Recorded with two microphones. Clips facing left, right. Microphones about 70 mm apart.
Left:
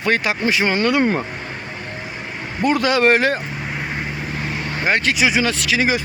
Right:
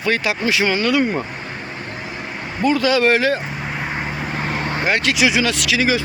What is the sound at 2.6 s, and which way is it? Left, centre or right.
Speech, left.